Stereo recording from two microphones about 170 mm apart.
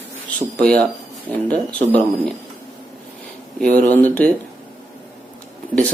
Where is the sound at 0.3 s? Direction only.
60° right (ahead or behind).